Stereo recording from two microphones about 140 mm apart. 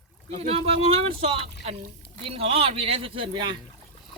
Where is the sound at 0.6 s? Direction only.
45° right (ahead or behind).